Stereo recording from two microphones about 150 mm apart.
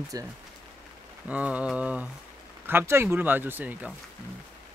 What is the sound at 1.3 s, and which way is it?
Speech, 10° right (ahead or behind).